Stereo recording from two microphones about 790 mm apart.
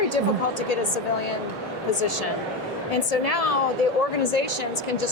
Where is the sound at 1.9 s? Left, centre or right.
Left.